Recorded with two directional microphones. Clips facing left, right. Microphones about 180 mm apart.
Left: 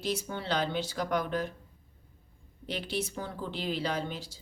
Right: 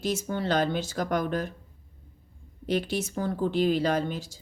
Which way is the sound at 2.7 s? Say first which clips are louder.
Right 6 dB; 45° right (ahead or behind).